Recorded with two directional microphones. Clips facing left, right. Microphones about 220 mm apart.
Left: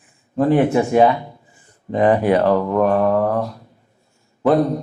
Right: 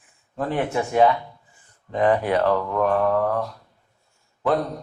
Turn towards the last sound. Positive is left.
turn(degrees=10)  # may be behind; listen again after turning